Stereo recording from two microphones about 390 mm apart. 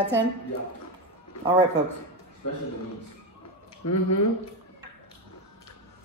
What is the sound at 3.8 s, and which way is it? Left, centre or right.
Speech, left.